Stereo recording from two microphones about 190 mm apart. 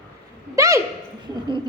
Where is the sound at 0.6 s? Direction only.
15° right (ahead or behind).